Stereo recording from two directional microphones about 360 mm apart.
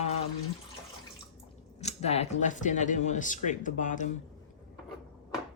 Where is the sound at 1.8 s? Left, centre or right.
Centre.